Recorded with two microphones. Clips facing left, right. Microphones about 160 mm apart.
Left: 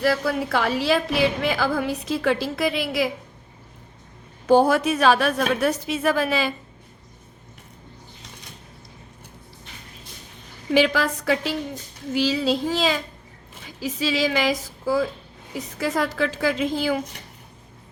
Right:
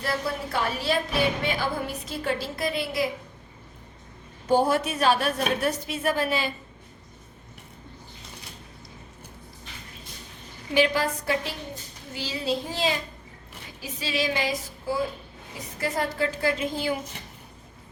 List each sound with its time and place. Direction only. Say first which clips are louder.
0.0 s a woman's voice: left 7 dB; 90° left
4.4 s a woman's voice: left 5 dB; 90° left
10.8 s a woman's voice: left 3 dB; 90° left